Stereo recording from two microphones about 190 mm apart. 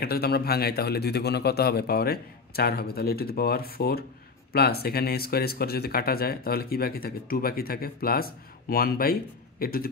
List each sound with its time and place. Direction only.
0.0 s a man's voice: 55° left (ahead or behind)